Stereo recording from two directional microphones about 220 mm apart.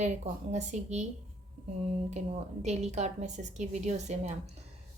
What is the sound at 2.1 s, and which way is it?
A woman's voice, 30° right (ahead or behind).